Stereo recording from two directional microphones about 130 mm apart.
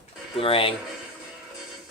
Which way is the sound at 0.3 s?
45° left (ahead or behind).